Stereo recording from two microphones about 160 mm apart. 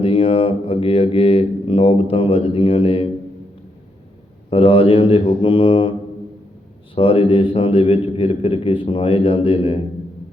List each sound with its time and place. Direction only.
0.0 s speech: 35° left (ahead or behind)
4.4 s speech: 35° left (ahead or behind)
6.9 s speech: 35° left (ahead or behind)